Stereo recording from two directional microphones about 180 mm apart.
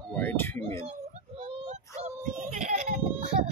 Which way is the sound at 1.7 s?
40° right (ahead or behind).